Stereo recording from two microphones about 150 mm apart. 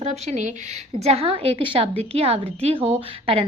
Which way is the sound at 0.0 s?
50° right (ahead or behind).